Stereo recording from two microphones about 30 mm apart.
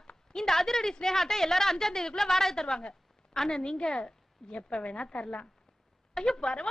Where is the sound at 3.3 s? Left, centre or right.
Centre.